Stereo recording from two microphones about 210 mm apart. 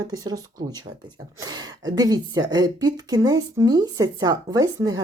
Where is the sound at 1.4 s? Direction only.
20° right (ahead or behind).